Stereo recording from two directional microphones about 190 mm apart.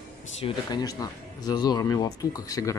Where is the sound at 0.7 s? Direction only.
20° left (ahead or behind).